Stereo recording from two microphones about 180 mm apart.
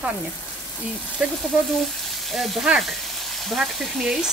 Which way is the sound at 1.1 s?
Centre (ahead or behind).